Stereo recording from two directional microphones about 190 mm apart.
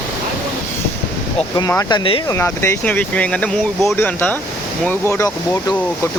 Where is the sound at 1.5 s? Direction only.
20° left (ahead or behind).